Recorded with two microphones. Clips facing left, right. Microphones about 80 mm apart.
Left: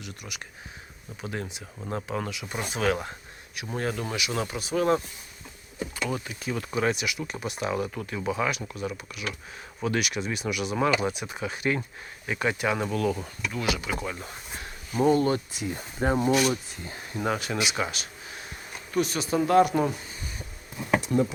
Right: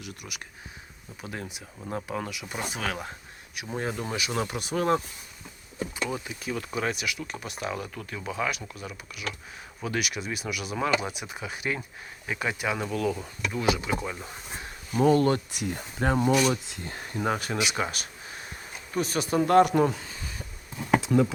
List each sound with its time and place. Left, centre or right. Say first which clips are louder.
0.0 s speech: left 1 dB; centre
3.5 s speech: left 1 dB; centre
4.1 s speech: even; right
6.1 s speech: left 1 dB; centre
13.5 s speech: right 3 dB; right
14.0 s speech: left 1 dB; centre
15.0 s speech: right 1 dB; right
16.1 s speech: even; centre
16.6 s speech: right 1 dB; right
17.2 s speech: even; right
17.7 s a sound: even; right
18.9 s speech: even; right
20.0 s a sound: right 1 dB; right
21.1 s speech: right 2 dB; right